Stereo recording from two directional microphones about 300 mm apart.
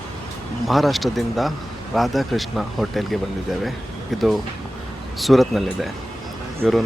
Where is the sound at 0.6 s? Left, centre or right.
Centre.